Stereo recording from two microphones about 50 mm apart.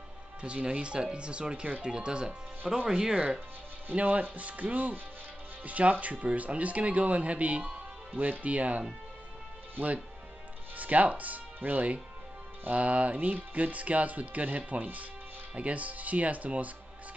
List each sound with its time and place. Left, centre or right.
0.4 s speech: right
3.9 s speech: right
10.8 s speech: right